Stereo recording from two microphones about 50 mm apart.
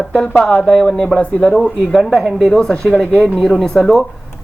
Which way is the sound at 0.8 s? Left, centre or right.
Left.